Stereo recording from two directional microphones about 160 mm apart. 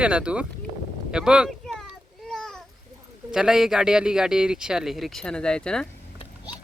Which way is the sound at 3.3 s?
5° right (ahead or behind).